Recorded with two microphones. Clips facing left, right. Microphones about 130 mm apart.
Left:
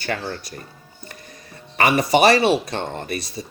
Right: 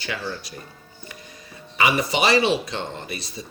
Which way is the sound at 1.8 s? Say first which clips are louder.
Left 5 dB; 55° left (ahead or behind).